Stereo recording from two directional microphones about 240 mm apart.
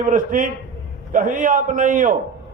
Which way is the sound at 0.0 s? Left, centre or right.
Right.